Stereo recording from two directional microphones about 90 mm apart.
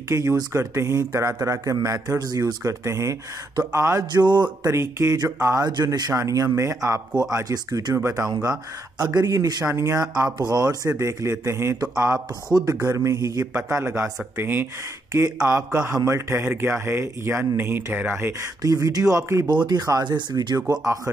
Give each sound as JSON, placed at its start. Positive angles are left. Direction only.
{"t": 0.1, "sound": "a man's voice", "side_deg": -30}
{"t": 4.1, "sound": "speech", "side_deg": -55}
{"t": 4.6, "sound": "a man's voice", "side_deg": -30}
{"t": 5.7, "sound": "speech", "side_deg": -50}
{"t": 6.1, "sound": "a man's voice", "side_deg": -35}
{"t": 7.4, "sound": "speech", "side_deg": -45}
{"t": 7.9, "sound": "a man's voice", "side_deg": -30}
{"t": 8.4, "sound": "speech", "side_deg": -45}
{"t": 9.7, "sound": "a man's voice", "side_deg": -30}
{"t": 10.4, "sound": "a man's voice", "side_deg": -40}
{"t": 18.6, "sound": "a man's voice", "side_deg": -40}
{"t": 19.4, "sound": "speech", "side_deg": -55}
{"t": 20.8, "sound": "a man's voice", "side_deg": -35}